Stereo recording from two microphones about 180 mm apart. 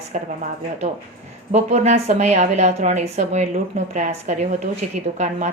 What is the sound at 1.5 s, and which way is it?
Speech, 40° right (ahead or behind).